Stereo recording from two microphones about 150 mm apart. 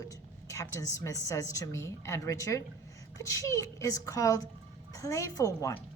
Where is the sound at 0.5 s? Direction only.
20° left (ahead or behind).